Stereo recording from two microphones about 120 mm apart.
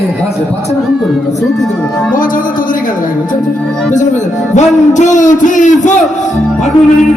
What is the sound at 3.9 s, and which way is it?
A man's voice, 85° left.